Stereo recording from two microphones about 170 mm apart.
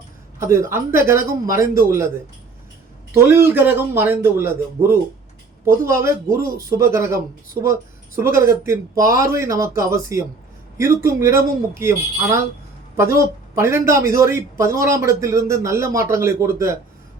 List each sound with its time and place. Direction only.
0.3 s a man's voice: 15° right (ahead or behind)
3.1 s a man's voice: 15° right (ahead or behind)